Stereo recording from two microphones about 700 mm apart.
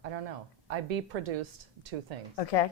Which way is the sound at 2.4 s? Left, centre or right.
Left.